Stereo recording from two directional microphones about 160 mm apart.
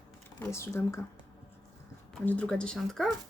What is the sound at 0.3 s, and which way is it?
Speech, 15° left (ahead or behind).